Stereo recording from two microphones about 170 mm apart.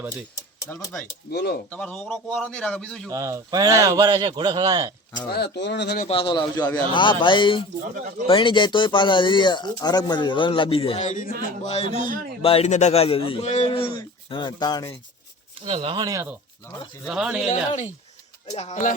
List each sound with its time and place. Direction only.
0.7 s a man's voice: 10° left (ahead or behind)
1.3 s speech: 70° left (ahead or behind)
1.7 s a man's voice: 5° left (ahead or behind)
3.1 s speech: 20° right (ahead or behind)
5.3 s speech: 80° left
6.1 s speech: 30° left (ahead or behind)
11.9 s a man's voice: 50° right (ahead or behind)
12.4 s a man's voice: 35° left (ahead or behind)
15.6 s speech: 30° right (ahead or behind)
17.1 s speech: 5° right (ahead or behind)
18.5 s speech: 45° left (ahead or behind)